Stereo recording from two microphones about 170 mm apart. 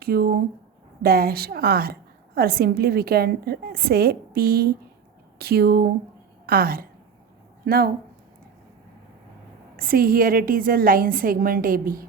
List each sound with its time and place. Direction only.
0.0 s a woman's voice: 65° right (ahead or behind)
9.7 s a woman's voice: 60° right (ahead or behind)